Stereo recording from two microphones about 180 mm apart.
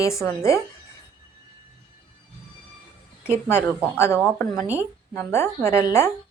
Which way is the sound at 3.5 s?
15° left (ahead or behind).